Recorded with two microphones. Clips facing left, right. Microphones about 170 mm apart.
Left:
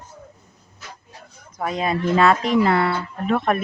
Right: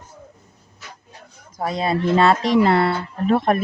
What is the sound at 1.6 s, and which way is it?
Speech, 35° right (ahead or behind).